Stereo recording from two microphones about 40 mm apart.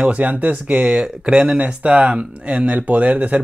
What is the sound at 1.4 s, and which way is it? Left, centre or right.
Speech, right.